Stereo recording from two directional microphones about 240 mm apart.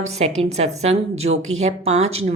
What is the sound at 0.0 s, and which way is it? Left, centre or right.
A woman's voice, right.